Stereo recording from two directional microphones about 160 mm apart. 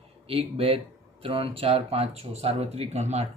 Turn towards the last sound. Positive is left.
turn(degrees=-45)  # may be behind; listen again after turning